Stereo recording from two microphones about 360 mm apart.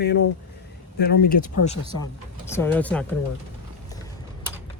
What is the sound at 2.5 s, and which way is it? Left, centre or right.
Speech, centre.